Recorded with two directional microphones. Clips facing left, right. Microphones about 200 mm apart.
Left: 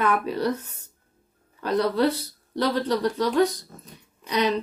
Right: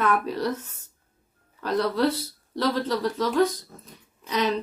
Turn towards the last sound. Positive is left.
turn(degrees=0)  # may be behind; listen again after turning